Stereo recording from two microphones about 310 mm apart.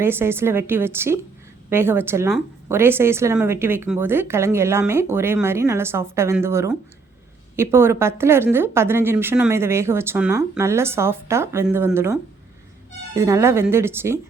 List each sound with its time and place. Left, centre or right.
0.0 s a woman's voice: centre